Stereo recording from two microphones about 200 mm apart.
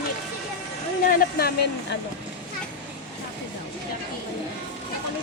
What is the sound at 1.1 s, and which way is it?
Speech, 45° left (ahead or behind).